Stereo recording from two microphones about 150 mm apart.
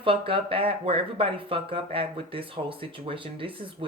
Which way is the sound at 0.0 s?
35° right (ahead or behind).